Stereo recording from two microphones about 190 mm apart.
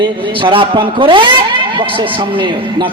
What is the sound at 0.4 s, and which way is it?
Speech, 25° right (ahead or behind).